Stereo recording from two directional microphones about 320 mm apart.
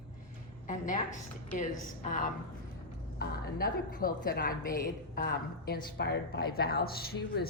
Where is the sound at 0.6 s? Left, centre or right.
Left.